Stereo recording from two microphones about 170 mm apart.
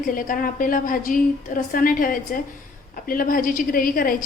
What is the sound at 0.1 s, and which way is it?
A woman's voice, 55° left (ahead or behind).